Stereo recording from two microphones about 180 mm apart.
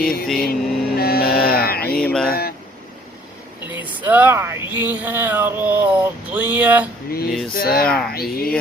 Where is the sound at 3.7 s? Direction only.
10° right (ahead or behind).